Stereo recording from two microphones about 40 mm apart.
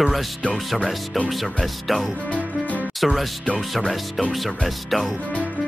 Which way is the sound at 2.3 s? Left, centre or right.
Left.